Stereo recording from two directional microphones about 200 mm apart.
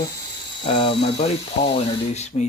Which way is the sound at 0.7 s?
25° left (ahead or behind).